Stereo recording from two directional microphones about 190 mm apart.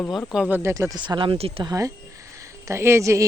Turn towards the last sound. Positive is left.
turn(degrees=-15)  # may be behind; listen again after turning